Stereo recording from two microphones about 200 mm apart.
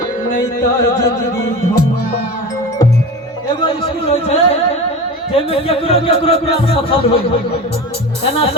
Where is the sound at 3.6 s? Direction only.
30° left (ahead or behind).